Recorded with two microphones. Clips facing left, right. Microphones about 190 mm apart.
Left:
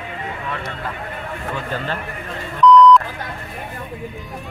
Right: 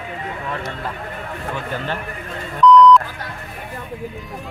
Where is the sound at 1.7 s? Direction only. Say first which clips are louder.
Even; 15° right (ahead or behind).